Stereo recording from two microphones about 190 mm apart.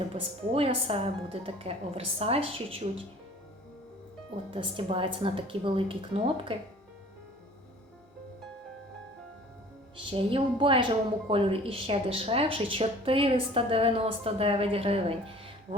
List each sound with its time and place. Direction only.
0.1 s a woman's voice: 30° right (ahead or behind)
4.5 s a woman's voice: 30° right (ahead or behind)
10.1 s a woman's voice: 30° right (ahead or behind)